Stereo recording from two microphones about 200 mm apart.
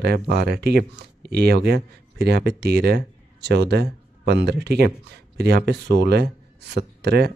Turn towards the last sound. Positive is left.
turn(degrees=-55)  # may be behind; listen again after turning